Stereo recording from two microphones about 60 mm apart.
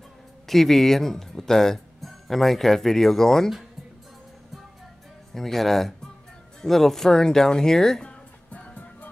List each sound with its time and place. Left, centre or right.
0.5 s speech: centre
5.3 s speech: centre
8.5 s music: left